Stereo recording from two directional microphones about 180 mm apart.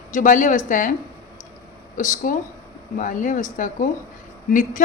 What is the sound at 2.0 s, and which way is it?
A woman's voice, 45° left (ahead or behind).